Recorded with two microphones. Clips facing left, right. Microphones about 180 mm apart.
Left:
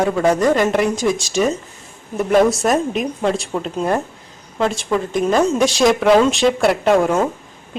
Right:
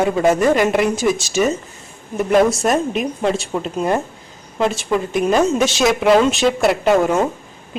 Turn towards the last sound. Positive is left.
turn(degrees=0)  # may be behind; listen again after turning